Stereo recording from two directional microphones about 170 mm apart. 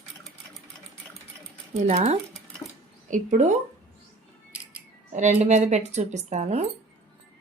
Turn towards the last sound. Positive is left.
turn(degrees=-40)  # may be behind; listen again after turning